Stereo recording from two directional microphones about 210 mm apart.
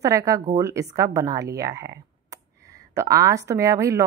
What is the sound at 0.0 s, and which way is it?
A woman's voice, 15° right (ahead or behind).